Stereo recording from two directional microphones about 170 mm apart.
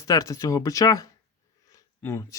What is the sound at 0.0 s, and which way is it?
Speech, 20° left (ahead or behind).